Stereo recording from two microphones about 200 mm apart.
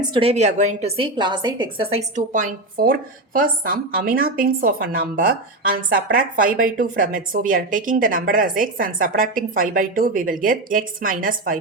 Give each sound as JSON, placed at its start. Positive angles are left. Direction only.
{"t": 0.1, "sound": "a woman's voice", "side_deg": -30}